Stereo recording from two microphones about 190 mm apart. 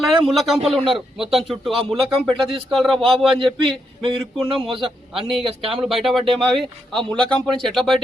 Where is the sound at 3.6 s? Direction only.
25° right (ahead or behind).